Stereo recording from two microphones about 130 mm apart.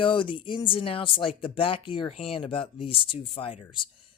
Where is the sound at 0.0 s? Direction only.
40° left (ahead or behind).